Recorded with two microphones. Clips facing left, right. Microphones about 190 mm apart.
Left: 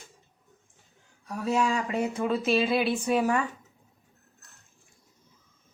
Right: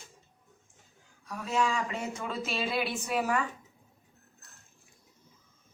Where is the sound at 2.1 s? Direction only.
30° left (ahead or behind).